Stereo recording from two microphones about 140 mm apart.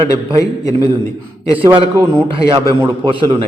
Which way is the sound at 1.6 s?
35° right (ahead or behind).